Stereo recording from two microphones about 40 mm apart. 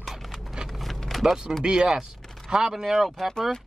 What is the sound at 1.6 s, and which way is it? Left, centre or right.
Speech, right.